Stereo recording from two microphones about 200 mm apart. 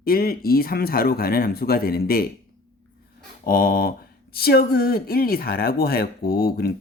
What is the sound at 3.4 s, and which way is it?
Speech, 45° left (ahead or behind).